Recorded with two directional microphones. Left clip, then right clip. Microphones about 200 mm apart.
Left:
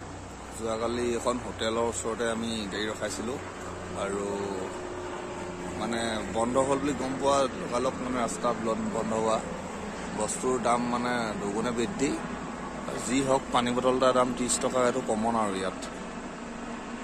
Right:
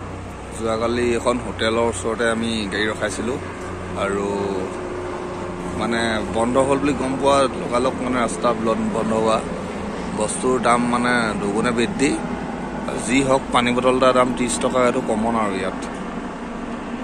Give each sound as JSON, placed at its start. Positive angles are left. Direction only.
{"t": 0.7, "sound": "speech", "side_deg": 10}
{"t": 5.8, "sound": "speech", "side_deg": 10}
{"t": 13.1, "sound": "a man's voice", "side_deg": 15}